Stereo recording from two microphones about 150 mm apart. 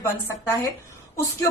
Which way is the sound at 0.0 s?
15° left (ahead or behind).